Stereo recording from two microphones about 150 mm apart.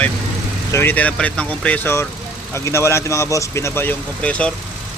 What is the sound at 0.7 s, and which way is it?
Speech, 10° left (ahead or behind).